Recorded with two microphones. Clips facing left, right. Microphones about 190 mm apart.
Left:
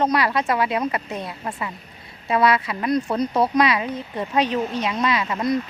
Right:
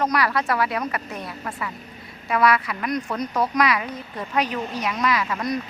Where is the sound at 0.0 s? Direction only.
25° left (ahead or behind).